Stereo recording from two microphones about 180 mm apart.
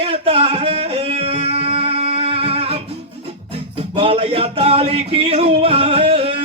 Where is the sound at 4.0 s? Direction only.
30° right (ahead or behind).